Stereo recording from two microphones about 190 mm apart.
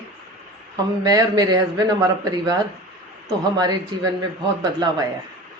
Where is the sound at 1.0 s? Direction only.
20° right (ahead or behind).